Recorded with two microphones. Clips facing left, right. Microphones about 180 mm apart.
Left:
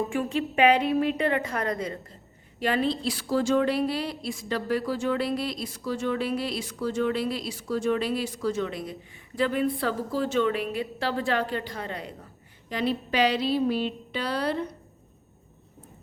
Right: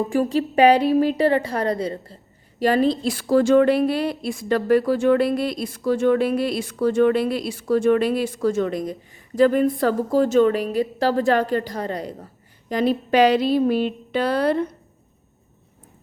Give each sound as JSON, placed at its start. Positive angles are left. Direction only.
{"t": 0.1, "sound": "a woman's voice", "side_deg": -35}